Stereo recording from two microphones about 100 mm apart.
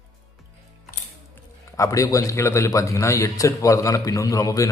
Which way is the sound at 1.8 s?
35° left (ahead or behind).